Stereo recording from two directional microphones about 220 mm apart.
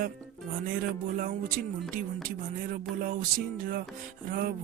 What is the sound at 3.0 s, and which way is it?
Music, 40° right (ahead or behind).